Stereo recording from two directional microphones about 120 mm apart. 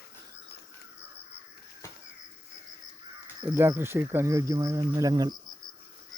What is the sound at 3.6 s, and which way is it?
Speech, 20° right (ahead or behind).